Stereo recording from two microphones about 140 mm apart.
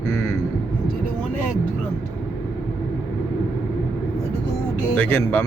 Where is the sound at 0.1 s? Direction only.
20° left (ahead or behind).